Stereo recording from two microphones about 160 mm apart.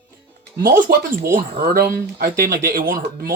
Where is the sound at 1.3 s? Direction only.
70° right (ahead or behind).